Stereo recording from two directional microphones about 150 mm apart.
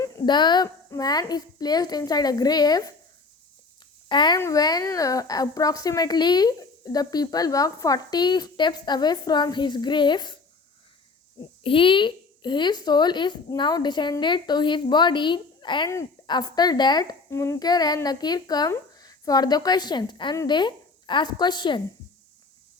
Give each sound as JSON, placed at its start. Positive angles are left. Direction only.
{"t": 0.0, "sound": "speech", "side_deg": 30}
{"t": 4.1, "sound": "speech", "side_deg": 30}
{"t": 11.6, "sound": "speech", "side_deg": 35}